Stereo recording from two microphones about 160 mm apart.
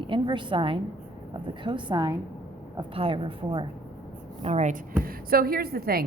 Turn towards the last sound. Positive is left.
turn(degrees=-70)  # may be behind; listen again after turning